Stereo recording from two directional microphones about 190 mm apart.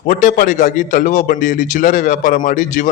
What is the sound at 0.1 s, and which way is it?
A man's voice, 45° left (ahead or behind).